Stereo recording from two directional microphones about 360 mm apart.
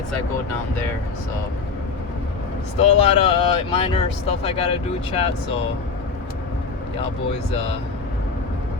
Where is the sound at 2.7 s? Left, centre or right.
Centre.